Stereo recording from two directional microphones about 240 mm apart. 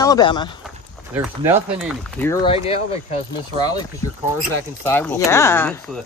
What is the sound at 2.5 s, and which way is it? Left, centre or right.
Speech, left.